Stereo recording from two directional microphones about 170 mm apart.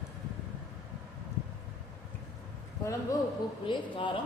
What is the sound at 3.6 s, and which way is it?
Speech, 30° left (ahead or behind).